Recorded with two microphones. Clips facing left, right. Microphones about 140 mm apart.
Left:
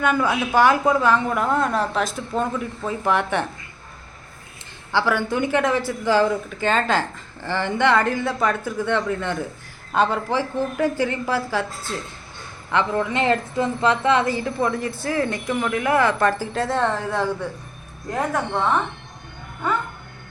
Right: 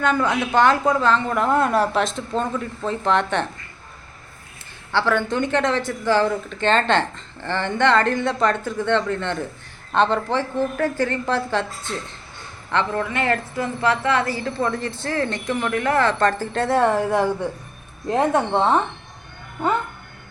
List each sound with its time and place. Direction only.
0.0 s a woman's voice: 10° left (ahead or behind)
4.9 s a woman's voice: 10° left (ahead or behind); by 18.8 s 30° right (ahead or behind)